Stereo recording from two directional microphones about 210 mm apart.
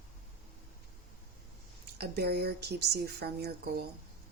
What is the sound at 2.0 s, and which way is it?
Speech, 50° right (ahead or behind).